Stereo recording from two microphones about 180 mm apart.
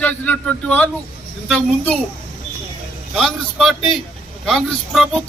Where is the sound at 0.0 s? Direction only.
10° left (ahead or behind).